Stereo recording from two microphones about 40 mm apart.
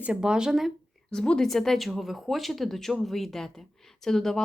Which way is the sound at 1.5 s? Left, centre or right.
Centre.